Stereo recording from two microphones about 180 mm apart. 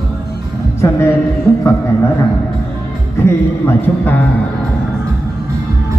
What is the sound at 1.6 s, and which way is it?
Speech, 15° left (ahead or behind).